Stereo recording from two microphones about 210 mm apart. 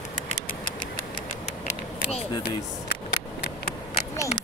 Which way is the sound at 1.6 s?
30° left (ahead or behind).